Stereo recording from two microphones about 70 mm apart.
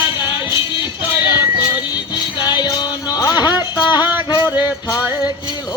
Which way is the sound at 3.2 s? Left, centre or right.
Left.